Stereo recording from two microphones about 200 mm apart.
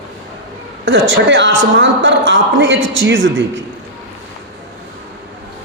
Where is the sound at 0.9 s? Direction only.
70° right (ahead or behind).